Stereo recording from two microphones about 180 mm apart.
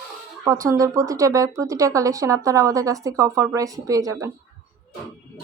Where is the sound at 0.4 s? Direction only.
20° right (ahead or behind).